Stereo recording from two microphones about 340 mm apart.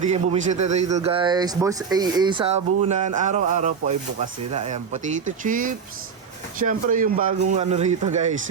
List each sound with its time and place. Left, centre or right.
0.0 s a man's voice: centre